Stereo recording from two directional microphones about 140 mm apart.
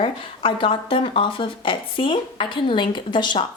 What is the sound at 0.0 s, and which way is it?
A woman's voice, 40° left (ahead or behind).